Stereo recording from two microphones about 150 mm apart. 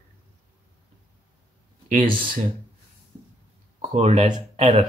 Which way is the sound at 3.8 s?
50° right (ahead or behind).